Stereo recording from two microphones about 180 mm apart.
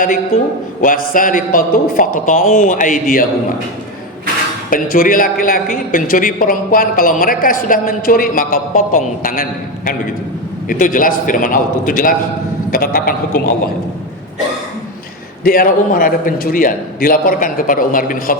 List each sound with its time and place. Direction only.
0.8 s a man's voice: 50° left (ahead or behind)
4.7 s a man's voice: 50° left (ahead or behind)
15.4 s a man's voice: 50° left (ahead or behind)